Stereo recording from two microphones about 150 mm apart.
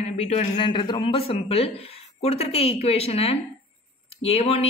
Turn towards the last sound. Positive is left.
turn(degrees=40)  # may be behind; listen again after turning